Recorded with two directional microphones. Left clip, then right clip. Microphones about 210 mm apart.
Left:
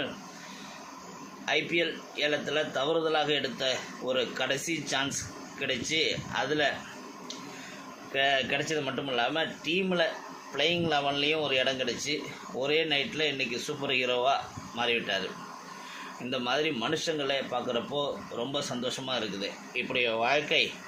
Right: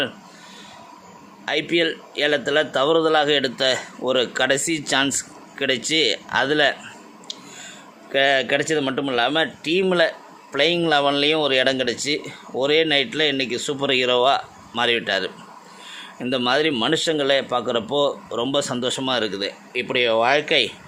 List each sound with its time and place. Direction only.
1.5 s speech: 55° right (ahead or behind)
8.1 s speech: 55° right (ahead or behind)
16.3 s speech: 55° right (ahead or behind)